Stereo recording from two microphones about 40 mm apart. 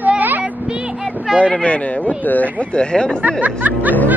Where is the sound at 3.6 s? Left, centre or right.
Right.